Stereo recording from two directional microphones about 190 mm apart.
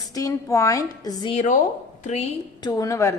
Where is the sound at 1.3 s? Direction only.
40° left (ahead or behind).